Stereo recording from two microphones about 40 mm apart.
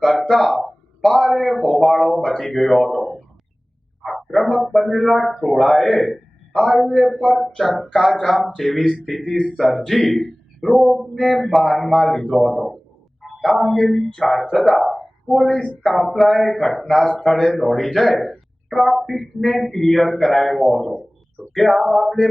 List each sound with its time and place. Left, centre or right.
0.0 s a sound: centre
0.4 s a man's voice: centre
4.1 s a sound: centre
4.4 s a man's voice: centre
9.3 s speech: centre
9.6 s a man's voice: centre
14.7 s a sound: centre
15.4 s speech: left
15.8 s a man's voice: centre